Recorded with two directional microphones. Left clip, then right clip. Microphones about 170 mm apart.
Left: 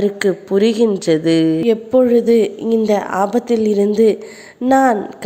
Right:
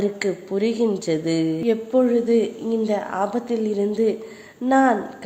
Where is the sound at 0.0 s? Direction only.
25° left (ahead or behind).